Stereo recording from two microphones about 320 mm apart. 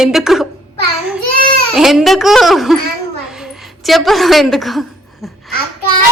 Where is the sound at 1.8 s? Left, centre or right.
Centre.